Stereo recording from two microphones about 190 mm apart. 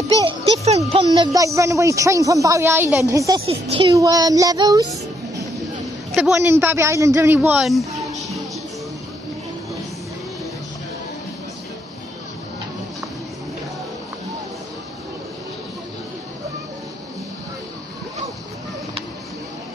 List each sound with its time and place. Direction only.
0.2 s a child's voice: 30° right (ahead or behind)
3.4 s speech: 30° right (ahead or behind)
3.9 s child singing: 20° right (ahead or behind)
6.1 s a child's voice: 10° right (ahead or behind)
7.3 s speech: 5° right (ahead or behind)